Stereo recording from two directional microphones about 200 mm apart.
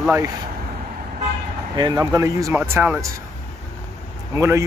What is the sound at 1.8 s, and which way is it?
Speech, 20° right (ahead or behind).